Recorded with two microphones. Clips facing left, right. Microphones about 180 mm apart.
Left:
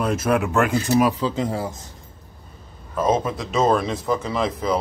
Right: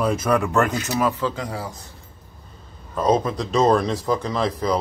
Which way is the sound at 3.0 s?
5° left (ahead or behind).